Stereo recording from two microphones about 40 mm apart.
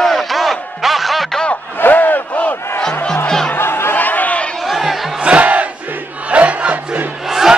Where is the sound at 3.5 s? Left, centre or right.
Left.